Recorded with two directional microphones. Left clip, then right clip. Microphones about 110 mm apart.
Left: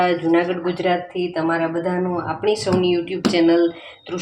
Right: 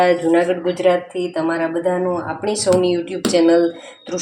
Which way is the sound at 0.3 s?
10° right (ahead or behind).